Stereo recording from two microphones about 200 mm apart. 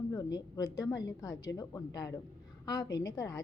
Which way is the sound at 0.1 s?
20° left (ahead or behind).